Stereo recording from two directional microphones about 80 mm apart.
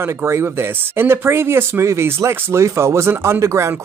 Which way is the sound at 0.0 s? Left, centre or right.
Right.